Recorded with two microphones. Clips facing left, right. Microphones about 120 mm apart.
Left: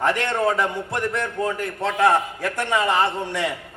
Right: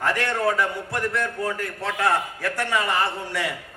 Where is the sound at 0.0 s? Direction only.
20° left (ahead or behind).